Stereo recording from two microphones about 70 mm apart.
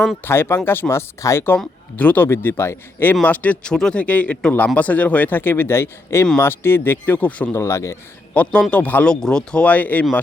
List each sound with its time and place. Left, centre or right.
0.3 s speech: left
2.0 s speech: left
2.2 s speech: left
3.2 s speech: left
3.7 s speech: centre
7.5 s speech: left
8.4 s speech: left
9.0 s speech: centre